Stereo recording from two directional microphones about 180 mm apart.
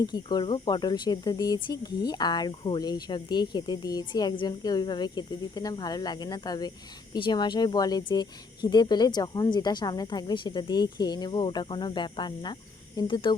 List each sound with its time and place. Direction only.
0.0 s speech: 25° left (ahead or behind)